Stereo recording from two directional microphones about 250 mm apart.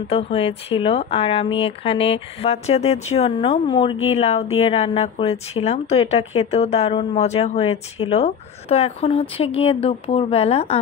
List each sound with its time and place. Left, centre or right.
0.1 s speech: left